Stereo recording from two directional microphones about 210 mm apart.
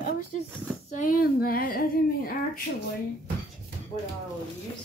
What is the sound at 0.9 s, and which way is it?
Speech, 40° left (ahead or behind).